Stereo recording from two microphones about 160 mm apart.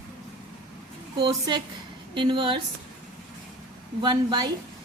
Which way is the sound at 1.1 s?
25° right (ahead or behind).